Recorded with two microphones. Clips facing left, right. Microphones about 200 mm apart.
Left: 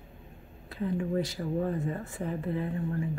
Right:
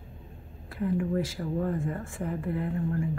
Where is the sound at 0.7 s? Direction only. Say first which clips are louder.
Right 2 dB; 25° left (ahead or behind).